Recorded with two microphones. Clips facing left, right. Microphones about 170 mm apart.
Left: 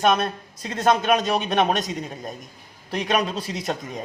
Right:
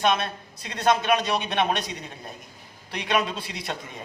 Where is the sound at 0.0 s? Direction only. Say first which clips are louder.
Left 3 dB; 45° left (ahead or behind).